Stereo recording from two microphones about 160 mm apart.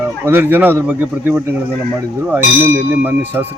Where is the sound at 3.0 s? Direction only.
10° right (ahead or behind).